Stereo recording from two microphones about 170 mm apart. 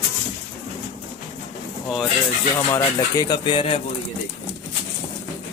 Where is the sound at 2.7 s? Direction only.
20° left (ahead or behind).